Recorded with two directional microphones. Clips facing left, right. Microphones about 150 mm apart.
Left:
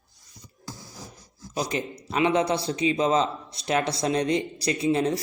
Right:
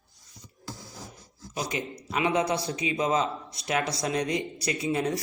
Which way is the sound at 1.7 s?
35° left (ahead or behind).